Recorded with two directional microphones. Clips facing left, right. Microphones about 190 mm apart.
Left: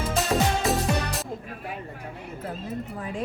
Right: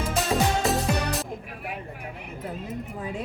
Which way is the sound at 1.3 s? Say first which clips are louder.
Even; 15° right (ahead or behind).